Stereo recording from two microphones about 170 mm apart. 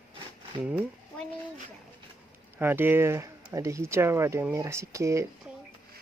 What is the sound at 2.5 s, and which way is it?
Speech, 10° right (ahead or behind).